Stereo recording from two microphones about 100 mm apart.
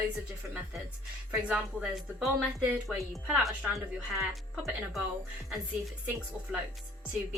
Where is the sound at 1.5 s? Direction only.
Centre (ahead or behind).